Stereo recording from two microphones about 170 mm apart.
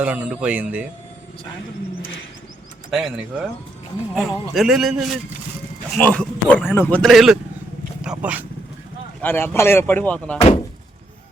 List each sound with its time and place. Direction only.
0.0 s speech: 5° right (ahead or behind)
2.9 s a man's voice: 5° right (ahead or behind)
6.0 s a man's voice: 10° left (ahead or behind); by 8.4 s 10° right (ahead or behind)
9.2 s speech: 15° left (ahead or behind)
10.3 s speech: 35° left (ahead or behind)